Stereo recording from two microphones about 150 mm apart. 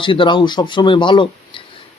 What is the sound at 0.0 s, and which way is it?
A man's voice, 35° left (ahead or behind).